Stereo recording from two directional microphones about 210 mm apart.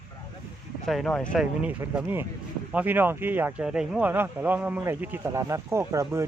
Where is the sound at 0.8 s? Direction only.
Centre (ahead or behind).